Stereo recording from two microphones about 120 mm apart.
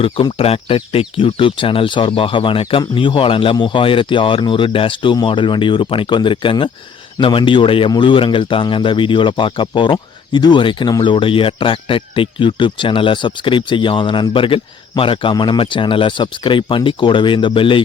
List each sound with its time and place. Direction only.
0.0 s speech: 50° left (ahead or behind)